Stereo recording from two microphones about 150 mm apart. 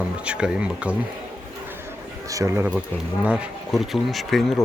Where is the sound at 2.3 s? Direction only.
20° right (ahead or behind).